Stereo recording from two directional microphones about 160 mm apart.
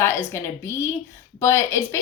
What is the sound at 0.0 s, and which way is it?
A woman's voice, 15° left (ahead or behind).